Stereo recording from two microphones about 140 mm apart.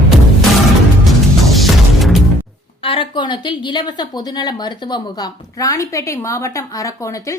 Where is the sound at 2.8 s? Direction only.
40° left (ahead or behind).